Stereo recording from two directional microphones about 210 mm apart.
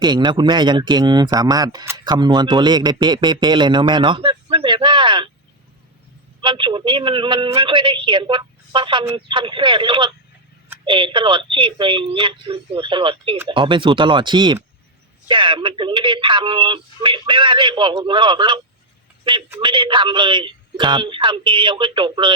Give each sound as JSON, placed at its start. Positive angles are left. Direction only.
{"t": 0.0, "sound": "speech", "side_deg": -20}
{"t": 6.4, "sound": "speech", "side_deg": -25}